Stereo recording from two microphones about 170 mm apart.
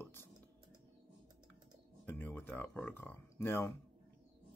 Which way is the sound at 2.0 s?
10° left (ahead or behind).